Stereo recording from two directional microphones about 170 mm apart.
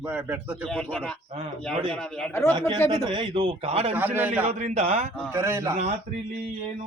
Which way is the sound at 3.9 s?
10° right (ahead or behind).